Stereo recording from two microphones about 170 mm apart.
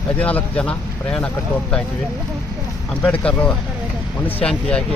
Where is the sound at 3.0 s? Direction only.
10° left (ahead or behind).